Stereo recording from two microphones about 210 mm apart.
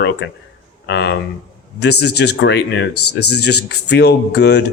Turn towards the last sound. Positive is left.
turn(degrees=50)  # may be behind; listen again after turning